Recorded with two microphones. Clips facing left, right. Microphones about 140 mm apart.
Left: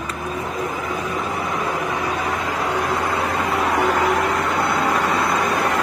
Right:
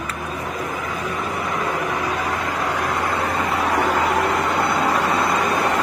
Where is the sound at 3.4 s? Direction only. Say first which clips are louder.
Left 1 dB; centre (ahead or behind).